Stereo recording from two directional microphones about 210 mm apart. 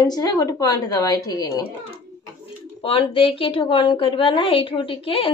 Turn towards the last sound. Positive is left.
turn(degrees=25)  # may be behind; listen again after turning